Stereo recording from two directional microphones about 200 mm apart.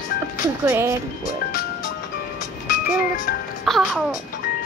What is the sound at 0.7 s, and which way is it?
Speech, 15° right (ahead or behind).